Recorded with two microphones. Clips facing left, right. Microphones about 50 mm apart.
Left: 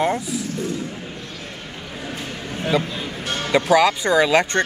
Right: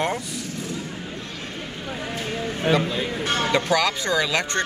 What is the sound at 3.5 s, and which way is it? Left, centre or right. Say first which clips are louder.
Speech: left 8 dB; centre.